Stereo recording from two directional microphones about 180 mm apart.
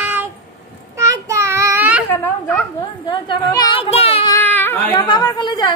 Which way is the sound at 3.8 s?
35° left (ahead or behind).